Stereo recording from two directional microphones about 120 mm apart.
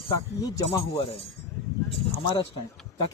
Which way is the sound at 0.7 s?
55° left (ahead or behind).